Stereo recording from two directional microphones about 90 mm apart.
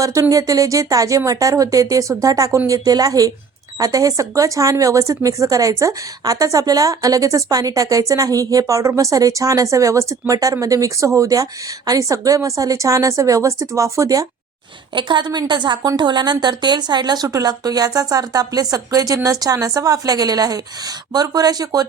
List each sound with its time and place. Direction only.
0.0 s speech: 40° right (ahead or behind)
14.9 s a woman's voice: 60° right (ahead or behind); by 21.8 s 45° right (ahead or behind)